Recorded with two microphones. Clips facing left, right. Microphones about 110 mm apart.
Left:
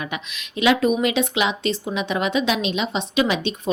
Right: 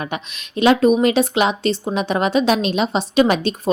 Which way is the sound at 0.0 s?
35° right (ahead or behind).